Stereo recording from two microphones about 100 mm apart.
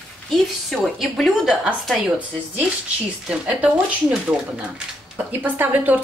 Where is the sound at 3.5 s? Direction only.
10° right (ahead or behind).